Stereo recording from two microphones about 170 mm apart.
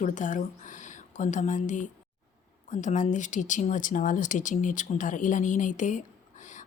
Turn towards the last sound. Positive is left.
turn(degrees=45)  # may be behind; listen again after turning